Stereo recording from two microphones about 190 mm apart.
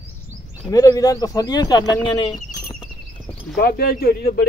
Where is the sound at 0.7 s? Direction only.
20° left (ahead or behind).